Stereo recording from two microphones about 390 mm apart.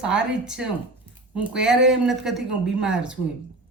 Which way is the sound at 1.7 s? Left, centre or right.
Right.